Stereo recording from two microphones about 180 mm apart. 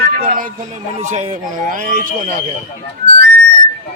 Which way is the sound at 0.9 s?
40° right (ahead or behind).